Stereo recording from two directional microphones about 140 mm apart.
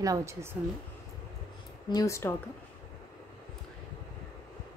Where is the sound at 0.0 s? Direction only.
20° right (ahead or behind).